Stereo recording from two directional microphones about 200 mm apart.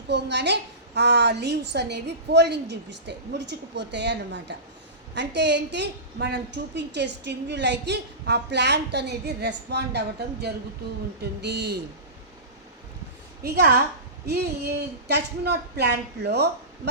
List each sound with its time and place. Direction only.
0.1 s a woman's voice: 60° right (ahead or behind)
11.2 s a woman's voice: 55° right (ahead or behind)
13.4 s a woman's voice: 55° right (ahead or behind)